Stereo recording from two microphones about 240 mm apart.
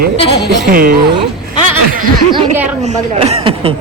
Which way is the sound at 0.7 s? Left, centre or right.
Right.